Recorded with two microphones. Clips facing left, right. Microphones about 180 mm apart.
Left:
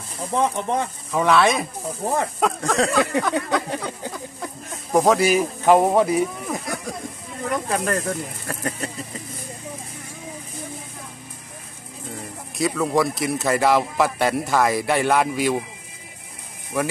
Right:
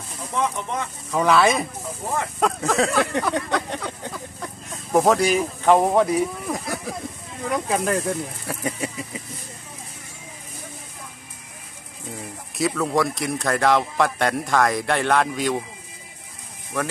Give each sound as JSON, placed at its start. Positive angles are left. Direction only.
{"t": 0.3, "sound": "speech", "side_deg": 35}
{"t": 1.1, "sound": "speech", "side_deg": 0}
{"t": 12.5, "sound": "speech", "side_deg": 0}
{"t": 16.7, "sound": "speech", "side_deg": 10}